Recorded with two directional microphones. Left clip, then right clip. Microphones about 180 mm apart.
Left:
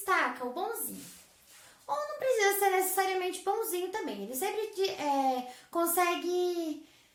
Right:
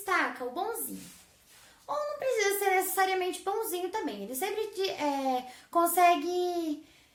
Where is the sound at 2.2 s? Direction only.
30° right (ahead or behind).